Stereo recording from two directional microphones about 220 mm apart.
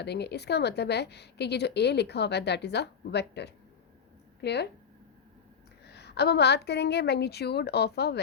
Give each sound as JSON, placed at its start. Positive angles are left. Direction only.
{"t": 0.0, "sound": "a woman's voice", "side_deg": 50}
{"t": 5.9, "sound": "a woman's voice", "side_deg": 50}